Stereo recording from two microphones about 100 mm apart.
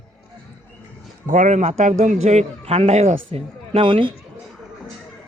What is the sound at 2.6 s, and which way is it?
Speech, 90° right.